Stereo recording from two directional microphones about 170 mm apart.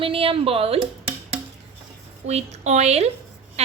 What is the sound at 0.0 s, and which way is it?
A woman's voice, 30° right (ahead or behind).